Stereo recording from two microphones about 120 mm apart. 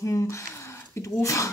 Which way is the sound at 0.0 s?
25° left (ahead or behind).